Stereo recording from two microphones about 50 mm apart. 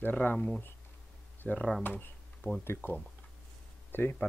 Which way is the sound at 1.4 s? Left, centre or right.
Left.